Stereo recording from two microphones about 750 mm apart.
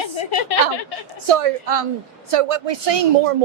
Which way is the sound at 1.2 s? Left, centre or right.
Right.